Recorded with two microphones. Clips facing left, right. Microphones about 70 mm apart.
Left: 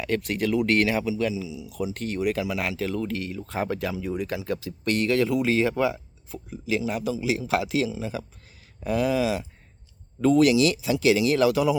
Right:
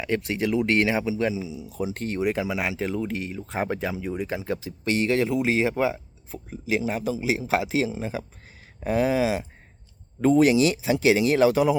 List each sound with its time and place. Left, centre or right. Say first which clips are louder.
0.0 s speech: even; centre
7.9 s speech: right 1 dB; right